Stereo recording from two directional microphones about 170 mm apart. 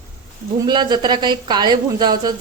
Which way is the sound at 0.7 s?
25° right (ahead or behind).